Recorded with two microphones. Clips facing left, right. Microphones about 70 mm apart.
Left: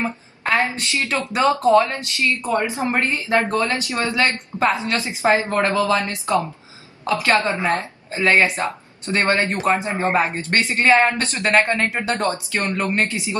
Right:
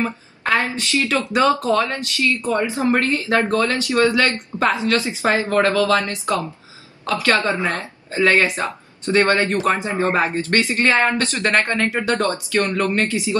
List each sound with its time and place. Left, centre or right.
0.6 s speech: left